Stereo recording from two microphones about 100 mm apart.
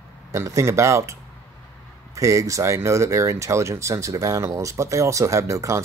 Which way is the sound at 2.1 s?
30° right (ahead or behind).